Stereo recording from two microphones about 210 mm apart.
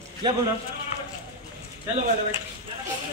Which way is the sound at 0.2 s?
20° right (ahead or behind).